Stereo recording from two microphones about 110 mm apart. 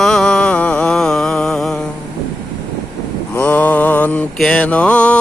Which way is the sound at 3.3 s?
15° left (ahead or behind).